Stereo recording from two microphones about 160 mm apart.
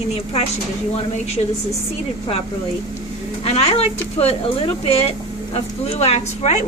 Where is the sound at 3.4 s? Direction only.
40° left (ahead or behind).